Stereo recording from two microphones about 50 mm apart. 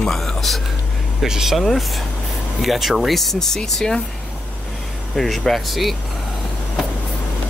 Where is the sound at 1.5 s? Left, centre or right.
Centre.